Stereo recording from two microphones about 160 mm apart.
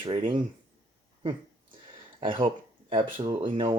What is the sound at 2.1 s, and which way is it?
Speech, 35° right (ahead or behind).